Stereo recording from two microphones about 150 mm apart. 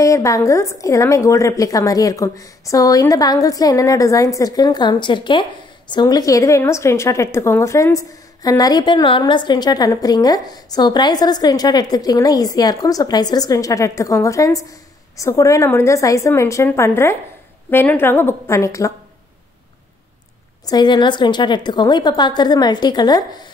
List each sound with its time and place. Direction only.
0.0 s a woman's voice: 20° left (ahead or behind)
20.6 s a woman's voice: 30° left (ahead or behind)